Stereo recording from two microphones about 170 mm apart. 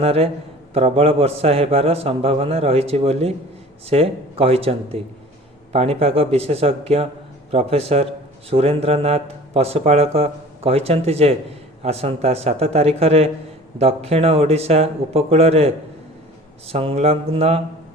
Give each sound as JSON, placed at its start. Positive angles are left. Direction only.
{"t": 0.0, "sound": "a man's voice", "side_deg": -35}